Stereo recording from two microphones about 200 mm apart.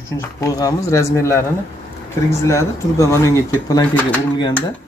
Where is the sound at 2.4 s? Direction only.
15° left (ahead or behind).